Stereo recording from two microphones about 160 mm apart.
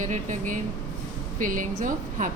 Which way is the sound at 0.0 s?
50° right (ahead or behind).